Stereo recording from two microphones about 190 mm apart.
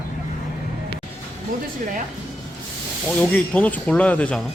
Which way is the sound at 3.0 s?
5° left (ahead or behind).